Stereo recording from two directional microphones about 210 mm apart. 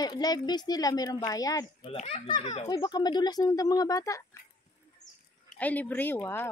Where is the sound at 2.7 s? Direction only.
20° left (ahead or behind).